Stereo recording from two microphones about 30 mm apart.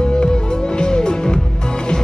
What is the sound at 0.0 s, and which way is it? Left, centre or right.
Music, left.